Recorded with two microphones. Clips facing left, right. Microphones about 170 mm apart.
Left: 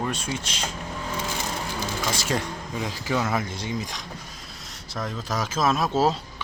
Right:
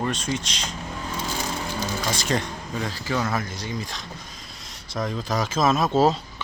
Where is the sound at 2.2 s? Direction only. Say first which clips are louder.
Right 1 dB; 5° left (ahead or behind).